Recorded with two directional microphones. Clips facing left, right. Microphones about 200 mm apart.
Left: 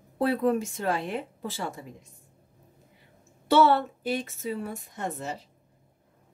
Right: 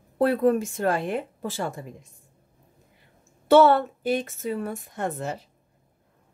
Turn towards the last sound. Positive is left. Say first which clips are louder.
# right 4 dB
turn(degrees=-55)  # may be behind; listen again after turning